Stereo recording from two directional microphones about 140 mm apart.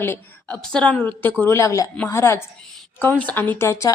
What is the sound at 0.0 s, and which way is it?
A woman's voice, 10° left (ahead or behind).